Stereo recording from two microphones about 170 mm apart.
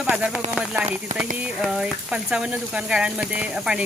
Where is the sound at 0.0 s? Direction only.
5° right (ahead or behind).